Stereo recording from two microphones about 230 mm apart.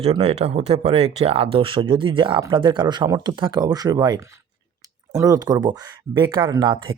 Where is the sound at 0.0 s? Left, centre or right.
Right.